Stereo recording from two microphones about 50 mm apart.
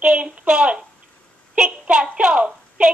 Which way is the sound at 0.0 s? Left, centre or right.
Right.